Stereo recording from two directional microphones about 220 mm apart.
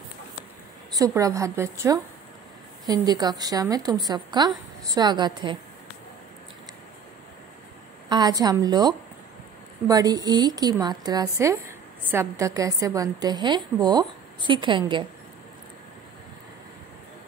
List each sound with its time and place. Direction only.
0.9 s a woman's voice: 15° right (ahead or behind)
8.1 s a woman's voice: 20° right (ahead or behind)